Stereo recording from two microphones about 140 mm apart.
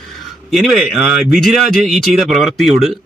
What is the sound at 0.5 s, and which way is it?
Speech, centre (ahead or behind).